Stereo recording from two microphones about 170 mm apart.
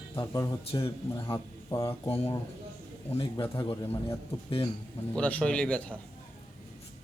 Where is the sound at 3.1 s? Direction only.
30° left (ahead or behind).